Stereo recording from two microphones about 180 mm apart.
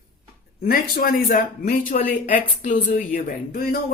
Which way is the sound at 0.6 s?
55° left (ahead or behind).